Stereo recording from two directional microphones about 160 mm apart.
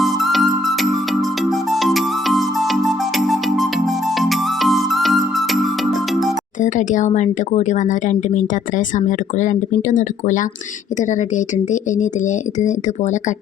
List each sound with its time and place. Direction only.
0.0 s music: centre (ahead or behind)
6.6 s speech: 50° left (ahead or behind)